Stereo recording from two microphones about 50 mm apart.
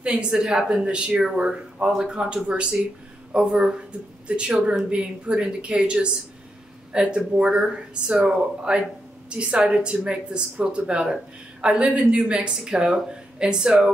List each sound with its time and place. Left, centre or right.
0.0 s speech: centre